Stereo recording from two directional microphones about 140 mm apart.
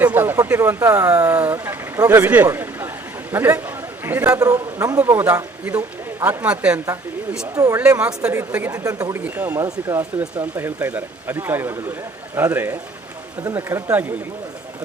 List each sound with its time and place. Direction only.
0.0 s a man's voice: 15° right (ahead or behind)
7.5 s a man's voice: 25° right (ahead or behind)
7.9 s a man's voice: 10° right (ahead or behind); by 9.2 s 25° right (ahead or behind)
9.2 s a man's voice: 15° right (ahead or behind)